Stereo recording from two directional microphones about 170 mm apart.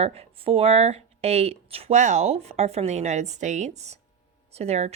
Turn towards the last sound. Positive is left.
turn(degrees=-40)  # may be behind; listen again after turning